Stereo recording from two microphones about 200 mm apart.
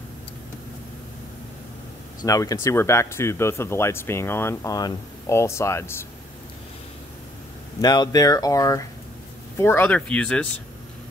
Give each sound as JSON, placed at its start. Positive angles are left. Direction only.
{"t": 2.2, "sound": "speech", "side_deg": 15}
{"t": 7.8, "sound": "speech", "side_deg": 20}